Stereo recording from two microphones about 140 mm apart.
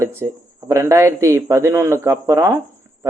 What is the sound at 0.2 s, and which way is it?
Speech, 20° right (ahead or behind).